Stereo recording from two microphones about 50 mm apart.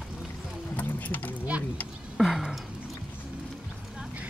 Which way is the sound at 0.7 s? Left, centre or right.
Left.